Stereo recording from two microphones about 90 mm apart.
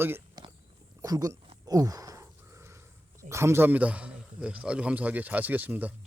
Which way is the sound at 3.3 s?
30° right (ahead or behind).